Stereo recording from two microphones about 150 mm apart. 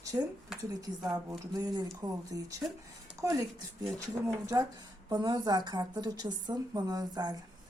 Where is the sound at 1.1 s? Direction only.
20° right (ahead or behind).